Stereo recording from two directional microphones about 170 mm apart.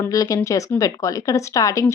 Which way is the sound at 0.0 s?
20° left (ahead or behind).